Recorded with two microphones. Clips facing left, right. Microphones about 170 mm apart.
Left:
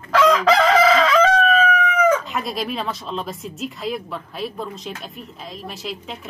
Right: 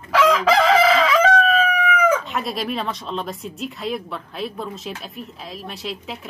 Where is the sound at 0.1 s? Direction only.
10° right (ahead or behind).